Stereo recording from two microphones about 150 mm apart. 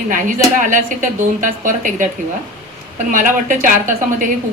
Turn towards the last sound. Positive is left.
turn(degrees=-60)  # may be behind; listen again after turning